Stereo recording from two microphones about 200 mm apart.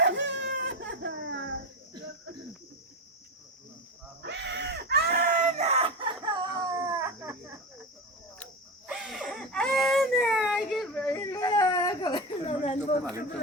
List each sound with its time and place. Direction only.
0.0 s baby cry: 60° right (ahead or behind)
4.2 s baby cry: 60° right (ahead or behind); by 7.3 s 15° right (ahead or behind)
8.9 s baby cry: 5° right (ahead or behind)
11.1 s baby cry: 15° left (ahead or behind); by 13.0 s 30° left (ahead or behind)